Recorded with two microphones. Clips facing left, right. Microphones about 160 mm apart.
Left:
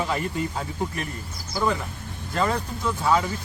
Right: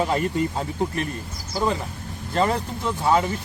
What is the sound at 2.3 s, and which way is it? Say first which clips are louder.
Speech: right 3 dB; 25° right (ahead or behind).